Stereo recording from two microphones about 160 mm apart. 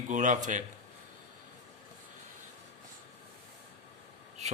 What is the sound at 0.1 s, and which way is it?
Speech, 50° right (ahead or behind).